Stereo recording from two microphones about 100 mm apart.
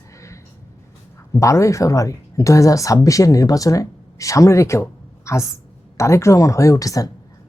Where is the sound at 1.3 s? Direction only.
30° left (ahead or behind).